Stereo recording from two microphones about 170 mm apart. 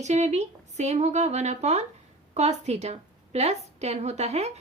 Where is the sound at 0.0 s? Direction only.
40° right (ahead or behind).